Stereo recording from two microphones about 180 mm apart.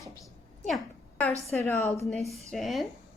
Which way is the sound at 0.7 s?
5° left (ahead or behind).